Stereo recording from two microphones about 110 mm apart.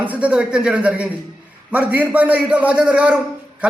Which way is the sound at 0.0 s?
15° right (ahead or behind).